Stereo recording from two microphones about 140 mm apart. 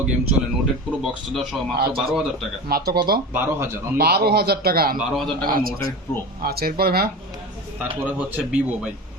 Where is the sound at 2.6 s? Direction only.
90° right.